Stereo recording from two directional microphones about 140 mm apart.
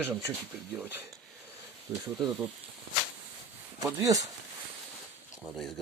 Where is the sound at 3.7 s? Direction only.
25° right (ahead or behind).